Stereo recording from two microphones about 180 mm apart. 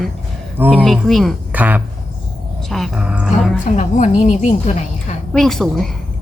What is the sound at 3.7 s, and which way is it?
A woman's voice, 40° left (ahead or behind).